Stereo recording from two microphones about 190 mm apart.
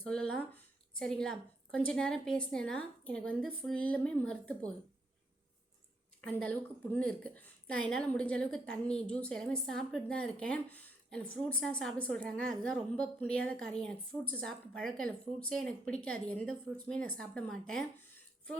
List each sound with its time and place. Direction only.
0.0 s a woman's voice: 5° left (ahead or behind)
6.2 s a woman's voice: 5° left (ahead or behind)